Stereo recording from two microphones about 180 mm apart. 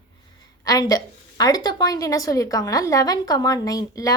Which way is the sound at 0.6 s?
20° left (ahead or behind).